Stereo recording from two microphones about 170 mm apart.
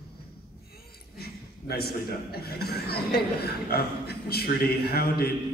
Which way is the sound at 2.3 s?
65° left (ahead or behind).